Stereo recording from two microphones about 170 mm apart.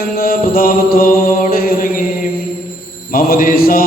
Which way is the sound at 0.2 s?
60° left (ahead or behind).